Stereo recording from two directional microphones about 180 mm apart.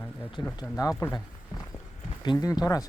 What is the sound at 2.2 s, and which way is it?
Speech, 20° left (ahead or behind).